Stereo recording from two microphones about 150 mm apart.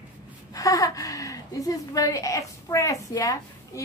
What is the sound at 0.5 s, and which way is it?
A woman's voice, 25° left (ahead or behind).